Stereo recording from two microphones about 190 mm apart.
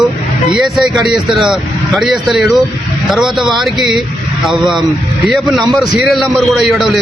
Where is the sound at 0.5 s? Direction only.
Centre (ahead or behind).